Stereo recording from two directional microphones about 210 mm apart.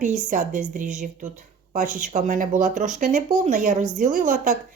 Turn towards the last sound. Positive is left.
turn(degrees=-40)  # may be behind; listen again after turning